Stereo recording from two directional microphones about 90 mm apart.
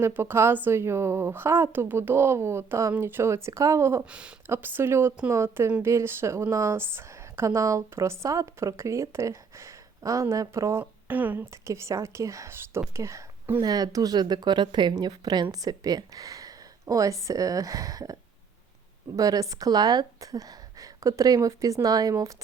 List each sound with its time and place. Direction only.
0.0 s a woman's voice: 25° right (ahead or behind)
11.1 s a woman's voice: 20° right (ahead or behind)
11.5 s a woman's voice: 35° right (ahead or behind)
13.6 s a woman's voice: 45° right (ahead or behind)